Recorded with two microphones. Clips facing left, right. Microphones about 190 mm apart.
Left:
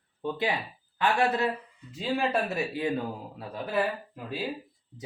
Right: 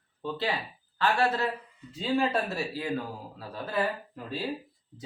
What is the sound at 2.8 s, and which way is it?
Speech, 20° left (ahead or behind).